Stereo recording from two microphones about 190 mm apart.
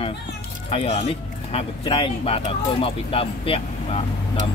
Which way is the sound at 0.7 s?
30° left (ahead or behind).